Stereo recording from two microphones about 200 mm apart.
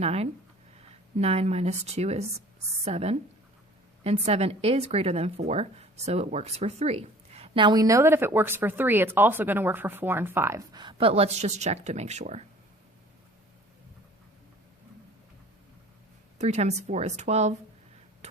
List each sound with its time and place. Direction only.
0.0 s speech: 30° right (ahead or behind)
16.4 s speech: 35° right (ahead or behind)